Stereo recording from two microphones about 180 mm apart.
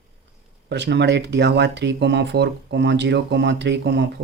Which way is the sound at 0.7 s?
75° right (ahead or behind).